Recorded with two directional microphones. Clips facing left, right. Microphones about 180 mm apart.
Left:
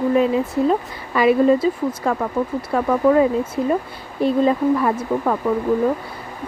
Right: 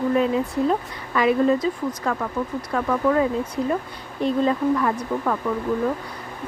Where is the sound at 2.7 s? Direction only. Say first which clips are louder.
Left 5 dB; 20° left (ahead or behind).